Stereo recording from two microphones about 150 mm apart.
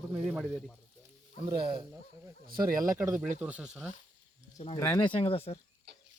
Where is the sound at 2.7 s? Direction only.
65° right (ahead or behind).